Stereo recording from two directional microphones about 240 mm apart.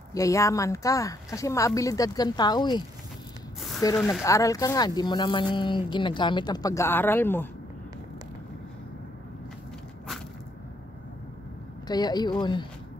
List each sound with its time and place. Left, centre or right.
0.1 s speech: centre
3.8 s speech: centre
11.9 s speech: centre